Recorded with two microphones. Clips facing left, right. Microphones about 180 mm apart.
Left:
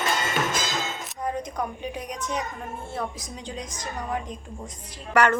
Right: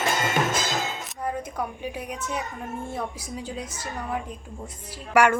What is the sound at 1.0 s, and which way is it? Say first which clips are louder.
A woman's voice: left 1 dB; 5° right (ahead or behind).